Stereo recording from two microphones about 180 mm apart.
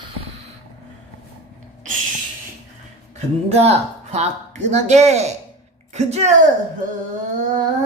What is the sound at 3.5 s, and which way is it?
Speech, 35° right (ahead or behind).